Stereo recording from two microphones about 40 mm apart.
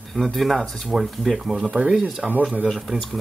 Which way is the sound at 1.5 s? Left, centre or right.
Centre.